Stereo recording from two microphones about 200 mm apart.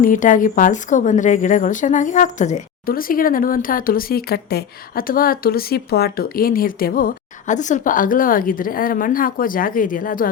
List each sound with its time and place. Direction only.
0.0 s a woman's voice: 40° left (ahead or behind)